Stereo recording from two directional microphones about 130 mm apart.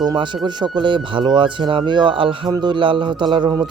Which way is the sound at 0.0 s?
35° right (ahead or behind).